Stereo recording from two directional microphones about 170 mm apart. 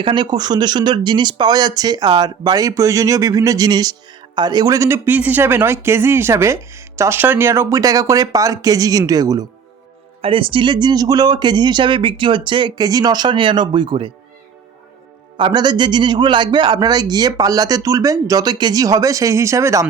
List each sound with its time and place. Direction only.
0.0 s a man's voice: 25° right (ahead or behind)
10.2 s a man's voice: 30° right (ahead or behind)
15.4 s a man's voice: 25° right (ahead or behind)